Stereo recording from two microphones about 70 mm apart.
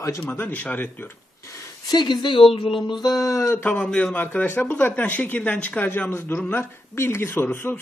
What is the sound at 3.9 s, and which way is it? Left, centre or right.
Speech, left.